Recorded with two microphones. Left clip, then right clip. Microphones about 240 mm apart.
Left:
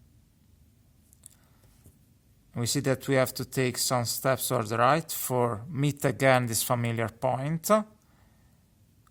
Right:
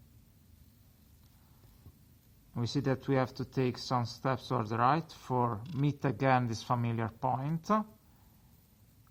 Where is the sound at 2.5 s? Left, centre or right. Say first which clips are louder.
Left 5 dB; left.